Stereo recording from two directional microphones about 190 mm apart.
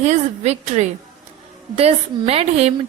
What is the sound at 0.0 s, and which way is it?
A woman's voice, 35° right (ahead or behind).